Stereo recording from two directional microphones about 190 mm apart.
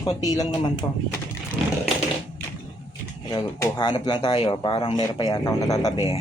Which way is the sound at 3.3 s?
20° left (ahead or behind).